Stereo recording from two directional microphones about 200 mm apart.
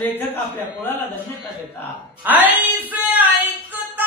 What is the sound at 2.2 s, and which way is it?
Speech, 10° right (ahead or behind).